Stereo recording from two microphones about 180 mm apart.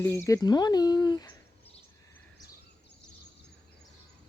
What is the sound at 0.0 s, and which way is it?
Speech, 15° left (ahead or behind).